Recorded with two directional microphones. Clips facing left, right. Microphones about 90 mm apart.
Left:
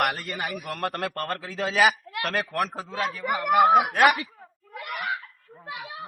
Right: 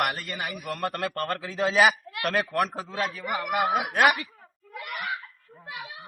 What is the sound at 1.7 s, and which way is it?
Speech, 15° right (ahead or behind).